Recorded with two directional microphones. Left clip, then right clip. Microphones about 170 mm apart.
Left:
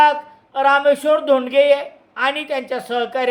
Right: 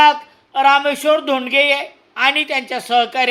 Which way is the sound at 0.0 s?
20° right (ahead or behind).